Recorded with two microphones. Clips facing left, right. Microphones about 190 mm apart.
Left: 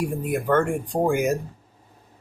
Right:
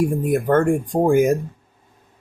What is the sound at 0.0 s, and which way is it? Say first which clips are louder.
Speech: right 6 dB; 45° right (ahead or behind).